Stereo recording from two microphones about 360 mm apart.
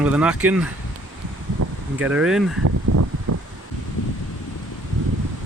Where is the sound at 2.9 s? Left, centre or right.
Right.